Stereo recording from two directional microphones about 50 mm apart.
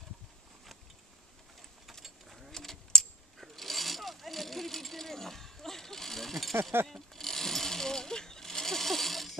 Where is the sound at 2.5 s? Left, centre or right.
Centre.